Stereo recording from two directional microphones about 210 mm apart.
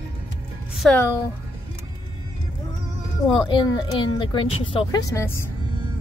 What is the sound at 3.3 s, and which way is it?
Speech, 20° left (ahead or behind).